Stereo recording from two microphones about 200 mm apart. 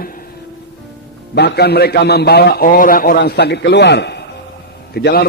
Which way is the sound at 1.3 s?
55° left (ahead or behind).